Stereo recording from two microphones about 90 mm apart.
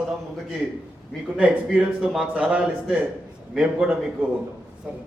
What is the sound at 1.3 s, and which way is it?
Speech, 15° right (ahead or behind).